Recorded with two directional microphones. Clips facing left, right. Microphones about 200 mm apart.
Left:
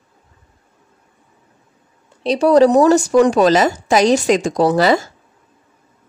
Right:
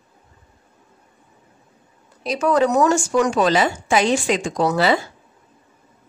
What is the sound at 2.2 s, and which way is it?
Speech, 30° left (ahead or behind).